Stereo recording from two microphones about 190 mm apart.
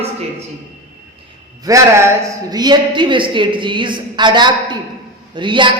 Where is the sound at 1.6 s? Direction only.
15° right (ahead or behind).